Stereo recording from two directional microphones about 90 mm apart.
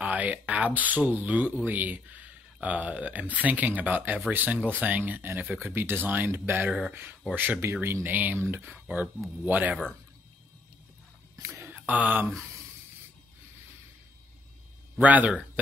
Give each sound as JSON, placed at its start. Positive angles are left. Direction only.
{"t": 0.0, "sound": "speech", "side_deg": -15}
{"t": 11.4, "sound": "speech", "side_deg": -30}
{"t": 15.0, "sound": "speech", "side_deg": -15}